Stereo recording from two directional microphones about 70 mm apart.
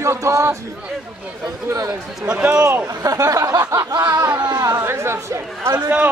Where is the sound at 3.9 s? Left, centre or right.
Right.